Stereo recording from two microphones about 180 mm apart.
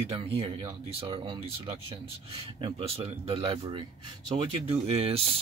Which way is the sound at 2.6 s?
35° right (ahead or behind).